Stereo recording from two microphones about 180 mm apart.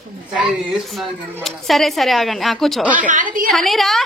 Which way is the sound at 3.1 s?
45° right (ahead or behind).